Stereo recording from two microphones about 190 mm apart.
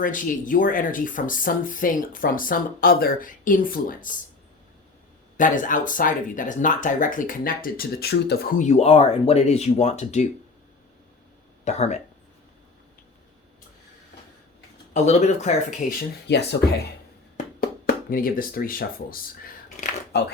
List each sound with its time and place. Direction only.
0.0 s speech: 45° left (ahead or behind)
5.4 s speech: 45° left (ahead or behind)
11.6 s speech: 35° left (ahead or behind)
14.9 s speech: 35° left (ahead or behind)
16.2 s speech: 65° left (ahead or behind)
17.3 s a sound: 50° left (ahead or behind)